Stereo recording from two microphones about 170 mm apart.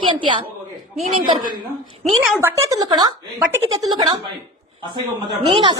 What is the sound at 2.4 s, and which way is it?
A woman's voice, 20° right (ahead or behind).